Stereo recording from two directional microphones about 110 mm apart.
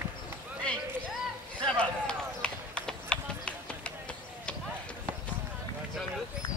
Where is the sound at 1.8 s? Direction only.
10° left (ahead or behind).